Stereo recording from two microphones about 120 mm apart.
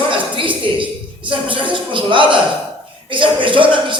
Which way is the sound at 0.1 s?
45° right (ahead or behind).